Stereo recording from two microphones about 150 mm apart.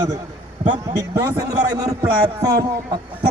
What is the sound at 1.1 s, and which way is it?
A man's voice, 20° right (ahead or behind).